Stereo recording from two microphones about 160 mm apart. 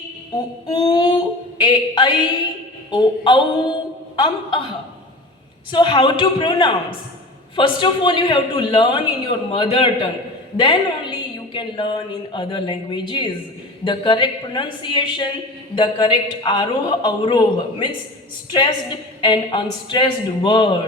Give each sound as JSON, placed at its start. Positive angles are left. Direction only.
{"t": 0.7, "sound": "a woman's voice", "side_deg": 25}
{"t": 5.7, "sound": "a woman's voice", "side_deg": 30}